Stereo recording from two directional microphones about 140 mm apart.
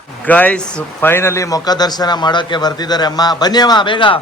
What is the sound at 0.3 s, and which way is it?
A man's voice, 10° left (ahead or behind).